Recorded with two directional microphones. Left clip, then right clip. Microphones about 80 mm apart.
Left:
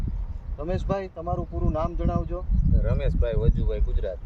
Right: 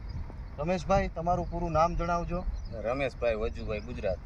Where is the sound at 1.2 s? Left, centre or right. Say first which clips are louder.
Right 1 dB; right.